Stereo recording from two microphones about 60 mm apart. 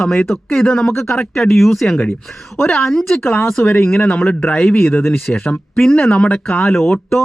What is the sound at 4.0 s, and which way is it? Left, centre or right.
A man's voice, left.